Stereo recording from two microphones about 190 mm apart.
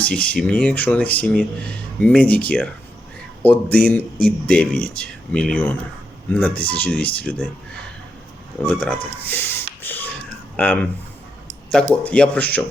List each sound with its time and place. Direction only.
0.0 s speech: 5° left (ahead or behind)
8.6 s speech: 5° left (ahead or behind)
12.0 s speech: 5° left (ahead or behind)